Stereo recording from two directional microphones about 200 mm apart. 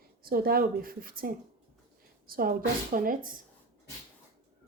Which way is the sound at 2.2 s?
45° right (ahead or behind).